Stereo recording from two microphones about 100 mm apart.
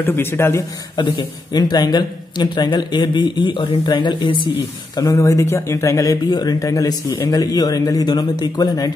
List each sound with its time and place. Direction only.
0.0 s a man's voice: 20° left (ahead or behind)
0.9 s a man's voice: 45° left (ahead or behind)
4.9 s speech: 35° left (ahead or behind)